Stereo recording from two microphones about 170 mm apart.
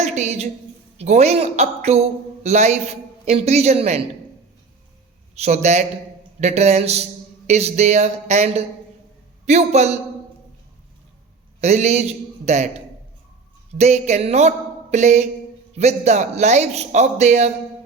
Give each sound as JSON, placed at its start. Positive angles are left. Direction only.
{"t": 0.0, "sound": "a woman's voice", "side_deg": -40}
{"t": 5.3, "sound": "a man's voice", "side_deg": -40}
{"t": 11.6, "sound": "a man's voice", "side_deg": -40}
{"t": 13.7, "sound": "a man's voice", "side_deg": -40}